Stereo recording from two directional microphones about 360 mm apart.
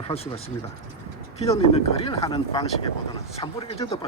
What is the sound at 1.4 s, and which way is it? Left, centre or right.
Speech, centre.